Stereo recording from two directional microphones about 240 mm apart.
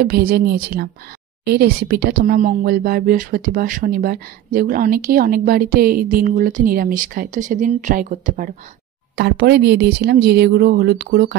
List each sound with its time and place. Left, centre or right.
0.0 s speech: right
9.1 s speech: right